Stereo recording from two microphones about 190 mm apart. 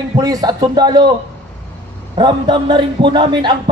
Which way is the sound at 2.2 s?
25° right (ahead or behind).